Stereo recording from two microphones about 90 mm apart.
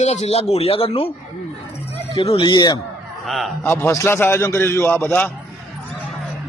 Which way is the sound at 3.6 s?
30° left (ahead or behind).